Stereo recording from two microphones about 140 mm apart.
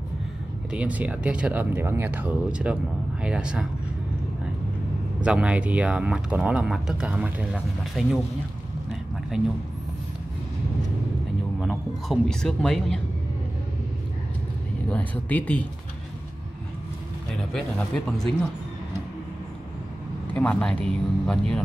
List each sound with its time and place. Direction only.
0.7 s speech: 10° right (ahead or behind)
5.2 s speech: 10° right (ahead or behind)
11.6 s speech: centre (ahead or behind)
14.9 s speech: 10° left (ahead or behind)
17.4 s speech: 5° left (ahead or behind)
20.3 s speech: 10° left (ahead or behind)